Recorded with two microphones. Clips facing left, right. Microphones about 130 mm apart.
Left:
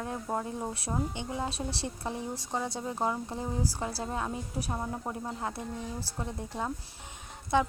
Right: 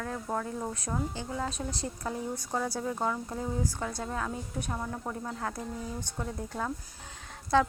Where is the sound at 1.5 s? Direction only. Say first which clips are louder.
Even; 75° left (ahead or behind).